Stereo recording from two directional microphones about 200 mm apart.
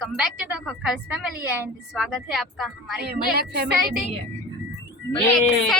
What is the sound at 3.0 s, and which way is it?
Speech, 50° right (ahead or behind).